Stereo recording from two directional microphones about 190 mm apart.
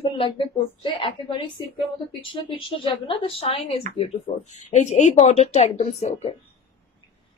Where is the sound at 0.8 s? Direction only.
25° left (ahead or behind).